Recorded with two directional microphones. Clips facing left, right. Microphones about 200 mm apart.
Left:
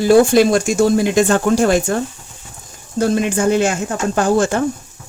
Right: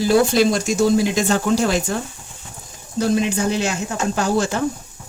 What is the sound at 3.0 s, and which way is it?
Speech, 50° left (ahead or behind).